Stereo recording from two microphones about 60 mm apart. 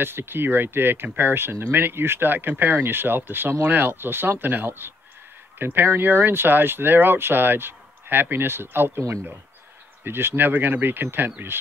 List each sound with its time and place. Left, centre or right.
0.0 s speech: right
10.0 s speech: right